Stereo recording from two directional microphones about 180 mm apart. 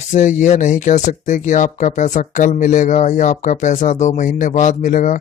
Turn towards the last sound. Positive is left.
turn(degrees=45)  # may be behind; listen again after turning